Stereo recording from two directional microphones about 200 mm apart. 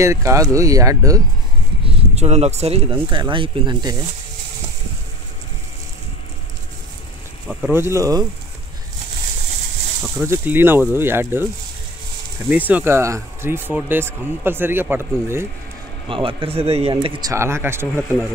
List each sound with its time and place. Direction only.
0.0 s speech: 15° right (ahead or behind)
1.9 s speech: 30° right (ahead or behind)
7.4 s speech: 10° right (ahead or behind)
10.1 s speech: 15° right (ahead or behind)
12.4 s speech: 10° right (ahead or behind)
16.1 s speech: 25° right (ahead or behind)